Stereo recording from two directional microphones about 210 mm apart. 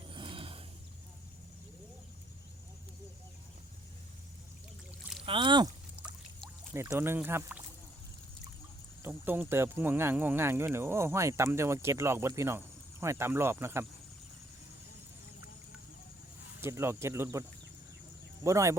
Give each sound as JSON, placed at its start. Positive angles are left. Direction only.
{"t": 0.1, "sound": "wild animals", "side_deg": -25}
{"t": 5.2, "sound": "speech", "side_deg": -25}
{"t": 6.7, "sound": "speech", "side_deg": -10}
{"t": 9.0, "sound": "speech", "side_deg": -10}
{"t": 16.6, "sound": "speech", "side_deg": -10}
{"t": 18.4, "sound": "speech", "side_deg": -15}